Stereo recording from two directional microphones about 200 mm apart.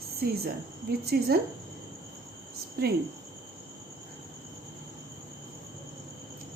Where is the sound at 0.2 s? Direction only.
50° right (ahead or behind).